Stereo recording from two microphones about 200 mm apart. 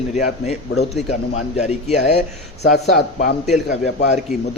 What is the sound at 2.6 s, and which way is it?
Speech, 55° left (ahead or behind).